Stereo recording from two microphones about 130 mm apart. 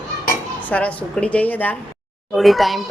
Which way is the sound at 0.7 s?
10° left (ahead or behind).